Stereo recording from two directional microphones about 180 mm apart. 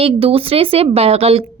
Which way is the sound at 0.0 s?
30° right (ahead or behind).